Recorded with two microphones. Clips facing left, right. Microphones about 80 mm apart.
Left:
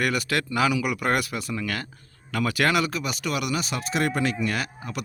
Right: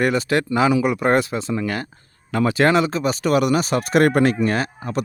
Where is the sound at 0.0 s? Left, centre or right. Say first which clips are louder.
Right 6 dB; right.